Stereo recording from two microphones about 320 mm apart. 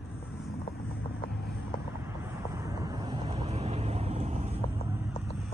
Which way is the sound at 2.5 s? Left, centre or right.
Centre.